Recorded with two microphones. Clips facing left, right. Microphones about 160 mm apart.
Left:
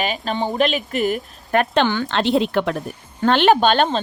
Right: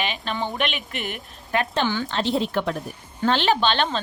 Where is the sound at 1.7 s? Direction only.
65° left (ahead or behind).